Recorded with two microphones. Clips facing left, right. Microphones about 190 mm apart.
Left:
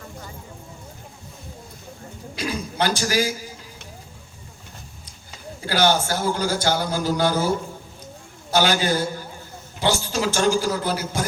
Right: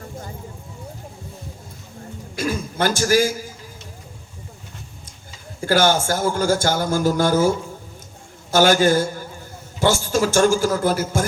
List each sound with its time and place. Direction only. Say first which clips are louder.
2.3 s a man's voice: right 4 dB; 45° right (ahead or behind)
5.5 s a man's voice: right 3 dB; 45° right (ahead or behind)